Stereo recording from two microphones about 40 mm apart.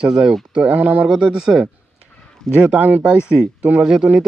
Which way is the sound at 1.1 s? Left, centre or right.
Right.